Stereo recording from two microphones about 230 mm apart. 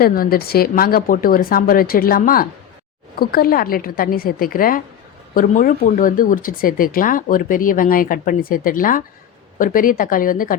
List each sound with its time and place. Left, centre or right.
0.0 s speech: left